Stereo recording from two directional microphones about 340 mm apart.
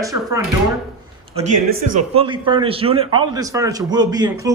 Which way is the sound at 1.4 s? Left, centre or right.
Right.